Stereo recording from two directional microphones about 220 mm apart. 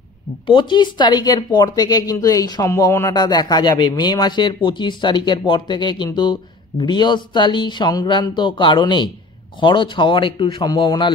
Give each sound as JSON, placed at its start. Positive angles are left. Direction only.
{"t": 0.5, "sound": "speech", "side_deg": 20}